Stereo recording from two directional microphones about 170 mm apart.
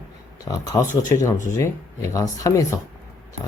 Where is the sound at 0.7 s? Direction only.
15° left (ahead or behind).